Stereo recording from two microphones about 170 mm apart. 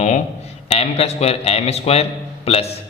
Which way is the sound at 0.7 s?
35° left (ahead or behind).